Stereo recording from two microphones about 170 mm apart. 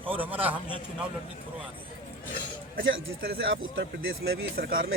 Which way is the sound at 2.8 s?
60° right (ahead or behind).